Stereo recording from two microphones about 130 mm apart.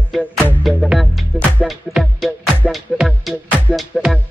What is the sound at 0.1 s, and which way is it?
Music, centre (ahead or behind).